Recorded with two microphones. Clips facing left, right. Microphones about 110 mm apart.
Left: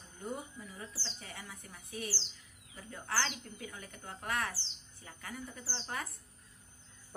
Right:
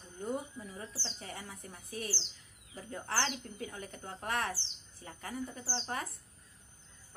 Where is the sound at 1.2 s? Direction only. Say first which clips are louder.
Right 3 dB; 35° right (ahead or behind).